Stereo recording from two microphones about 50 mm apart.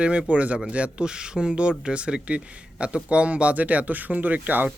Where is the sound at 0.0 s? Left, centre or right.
Right.